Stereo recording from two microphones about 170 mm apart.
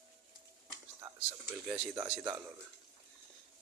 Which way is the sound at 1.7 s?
10° right (ahead or behind).